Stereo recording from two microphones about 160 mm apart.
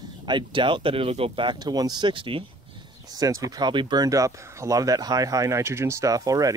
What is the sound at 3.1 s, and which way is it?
Speech, 20° right (ahead or behind).